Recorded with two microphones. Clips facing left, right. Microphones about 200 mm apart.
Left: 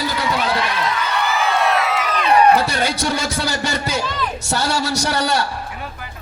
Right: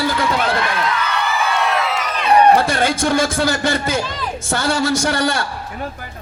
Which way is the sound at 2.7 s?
50° right (ahead or behind).